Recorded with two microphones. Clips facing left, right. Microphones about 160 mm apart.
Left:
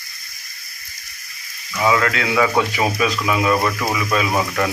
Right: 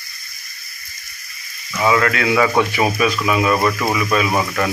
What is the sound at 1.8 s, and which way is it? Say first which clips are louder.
Speech: right 1 dB; 5° right (ahead or behind).